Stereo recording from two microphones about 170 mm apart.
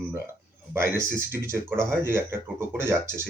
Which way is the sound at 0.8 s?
15° right (ahead or behind).